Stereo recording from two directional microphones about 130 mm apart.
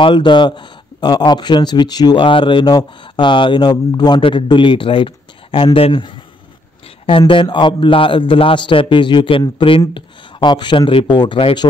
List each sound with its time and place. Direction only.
0.0 s speech: 35° left (ahead or behind)